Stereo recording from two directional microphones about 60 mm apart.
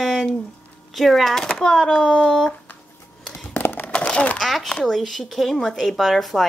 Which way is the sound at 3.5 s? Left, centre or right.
Left.